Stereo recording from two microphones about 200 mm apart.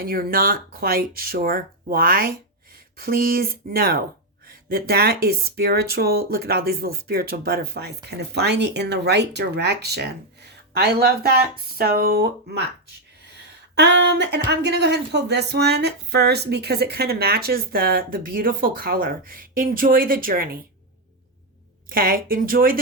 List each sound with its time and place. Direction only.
0.0 s speech: 45° right (ahead or behind)
13.7 s speech: 60° right (ahead or behind)
21.8 s speech: 45° right (ahead or behind)